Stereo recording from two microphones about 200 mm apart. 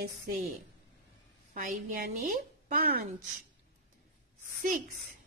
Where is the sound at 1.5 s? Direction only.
40° right (ahead or behind).